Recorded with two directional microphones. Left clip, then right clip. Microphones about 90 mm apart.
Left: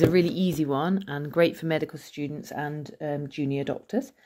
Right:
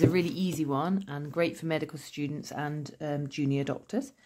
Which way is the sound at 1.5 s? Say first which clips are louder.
Left 4 dB; 25° left (ahead or behind).